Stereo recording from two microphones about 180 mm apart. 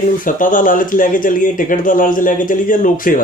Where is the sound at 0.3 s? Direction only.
50° left (ahead or behind).